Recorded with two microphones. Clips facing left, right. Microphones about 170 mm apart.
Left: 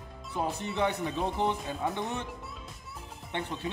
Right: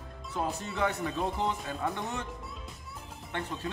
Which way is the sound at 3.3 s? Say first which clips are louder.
Left 1 dB; 20° left (ahead or behind).